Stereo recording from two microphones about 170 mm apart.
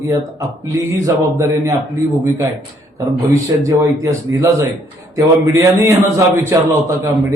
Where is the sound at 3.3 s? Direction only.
15° right (ahead or behind).